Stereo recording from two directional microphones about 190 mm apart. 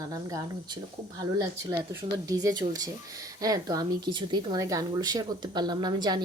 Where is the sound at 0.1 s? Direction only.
20° right (ahead or behind).